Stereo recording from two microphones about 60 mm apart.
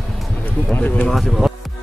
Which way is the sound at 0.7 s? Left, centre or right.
Left.